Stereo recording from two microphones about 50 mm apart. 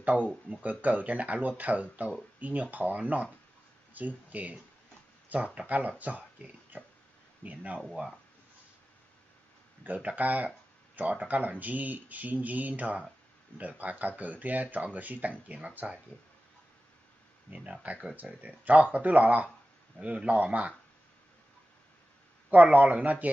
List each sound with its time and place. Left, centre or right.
0.5 s speech: right
7.4 s speech: right
9.8 s speech: right
17.6 s speech: right
22.5 s speech: right